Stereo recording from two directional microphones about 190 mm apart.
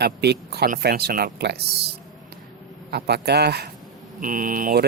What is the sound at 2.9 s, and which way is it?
Speech, 60° right (ahead or behind).